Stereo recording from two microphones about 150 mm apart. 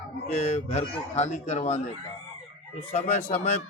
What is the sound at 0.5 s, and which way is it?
Speech, 45° left (ahead or behind).